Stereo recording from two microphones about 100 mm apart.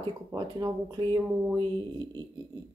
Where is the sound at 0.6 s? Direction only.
45° right (ahead or behind).